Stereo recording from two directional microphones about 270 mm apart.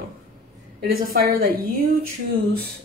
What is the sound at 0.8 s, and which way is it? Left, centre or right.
Speech, right.